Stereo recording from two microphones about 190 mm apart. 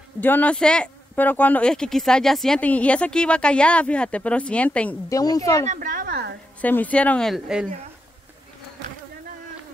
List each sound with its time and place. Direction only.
0.2 s speech: 10° left (ahead or behind)
5.1 s speech: 20° left (ahead or behind)
5.7 s a woman's voice: 45° right (ahead or behind)
6.6 s speech: 10° left (ahead or behind)